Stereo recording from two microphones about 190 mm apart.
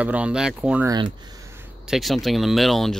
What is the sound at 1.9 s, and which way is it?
Speech, centre (ahead or behind).